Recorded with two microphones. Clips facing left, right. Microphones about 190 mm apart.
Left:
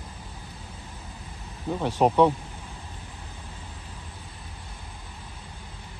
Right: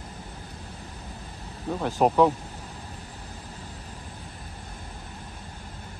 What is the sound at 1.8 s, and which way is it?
Speech, centre (ahead or behind).